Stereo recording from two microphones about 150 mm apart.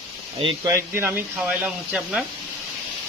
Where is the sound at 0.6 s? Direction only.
15° right (ahead or behind).